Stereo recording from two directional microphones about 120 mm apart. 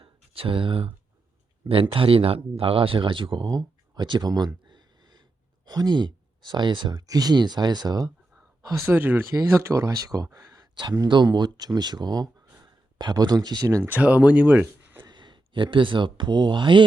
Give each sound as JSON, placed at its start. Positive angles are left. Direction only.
{"t": 0.0, "sound": "a sound", "side_deg": -50}
{"t": 1.6, "sound": "speech", "side_deg": -50}
{"t": 3.9, "sound": "a sound", "side_deg": -40}
{"t": 5.6, "sound": "speech", "side_deg": -35}
{"t": 8.9, "sound": "speech", "side_deg": -15}
{"t": 13.7, "sound": "speech", "side_deg": -20}
{"t": 15.0, "sound": "speech", "side_deg": -40}